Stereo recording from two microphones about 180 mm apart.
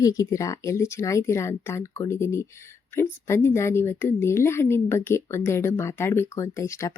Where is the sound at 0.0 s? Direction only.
20° left (ahead or behind).